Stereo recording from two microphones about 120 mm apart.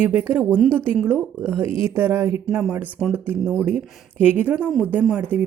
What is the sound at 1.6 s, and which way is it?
Speech, 20° right (ahead or behind).